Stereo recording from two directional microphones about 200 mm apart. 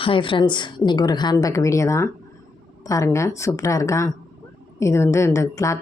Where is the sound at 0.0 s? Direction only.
25° left (ahead or behind).